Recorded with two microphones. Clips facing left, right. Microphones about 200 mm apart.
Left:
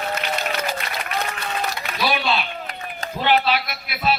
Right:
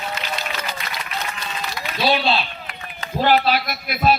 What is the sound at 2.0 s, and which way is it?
Speech, 30° right (ahead or behind).